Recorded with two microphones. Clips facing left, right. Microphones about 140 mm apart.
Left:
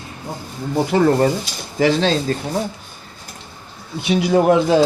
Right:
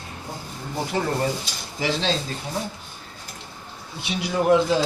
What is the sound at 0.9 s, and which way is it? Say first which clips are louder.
Speech: left 9 dB; 80° left.